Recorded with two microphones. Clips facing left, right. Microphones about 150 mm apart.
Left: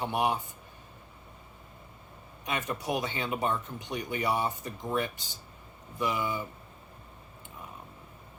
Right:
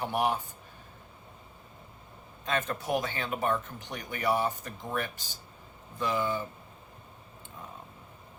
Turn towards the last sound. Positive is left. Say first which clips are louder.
# right 1 dB
turn(degrees=15)  # may be behind; listen again after turning